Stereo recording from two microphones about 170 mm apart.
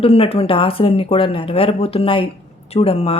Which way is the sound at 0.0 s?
35° left (ahead or behind).